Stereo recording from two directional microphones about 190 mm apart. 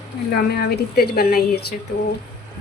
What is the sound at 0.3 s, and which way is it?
A woman's voice, 55° left (ahead or behind).